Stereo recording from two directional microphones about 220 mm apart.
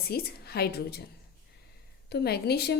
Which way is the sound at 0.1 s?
45° left (ahead or behind).